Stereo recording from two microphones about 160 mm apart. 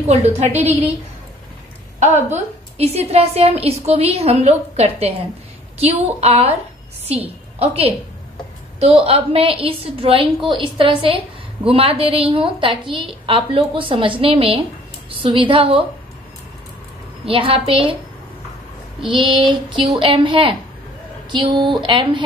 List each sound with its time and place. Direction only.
0.1 s a woman's voice: 45° right (ahead or behind)
0.5 s a woman's voice: 10° right (ahead or behind)
2.0 s a woman's voice: 45° right (ahead or behind)
17.3 s a woman's voice: 35° right (ahead or behind)
19.0 s a woman's voice: 30° right (ahead or behind)